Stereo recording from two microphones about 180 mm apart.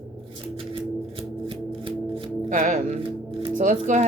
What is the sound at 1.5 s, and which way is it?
Music, 30° right (ahead or behind).